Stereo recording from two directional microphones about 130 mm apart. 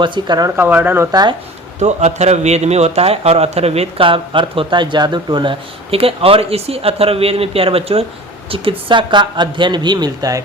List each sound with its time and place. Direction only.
0.0 s speech: 35° right (ahead or behind)
0.5 s speech: 15° right (ahead or behind)
1.1 s speech: 30° right (ahead or behind)
1.8 s a man's voice: 60° right (ahead or behind); by 10.4 s 30° right (ahead or behind)